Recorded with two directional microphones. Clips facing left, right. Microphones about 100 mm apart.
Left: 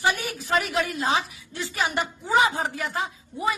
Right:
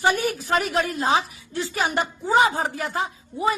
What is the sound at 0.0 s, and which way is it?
A woman's voice, 45° right (ahead or behind).